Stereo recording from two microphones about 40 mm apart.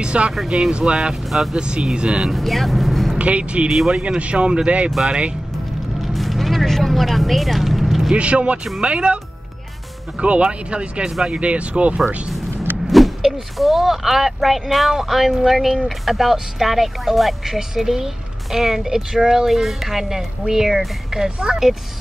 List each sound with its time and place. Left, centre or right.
0.0 s speech: right
2.3 s speech: centre
3.2 s speech: right
5.9 s vehicle: centre
8.2 s speech: right
10.2 s speech: right
12.8 s speech: centre